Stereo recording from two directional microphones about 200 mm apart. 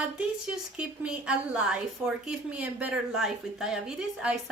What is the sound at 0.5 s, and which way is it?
A woman's voice, 5° right (ahead or behind).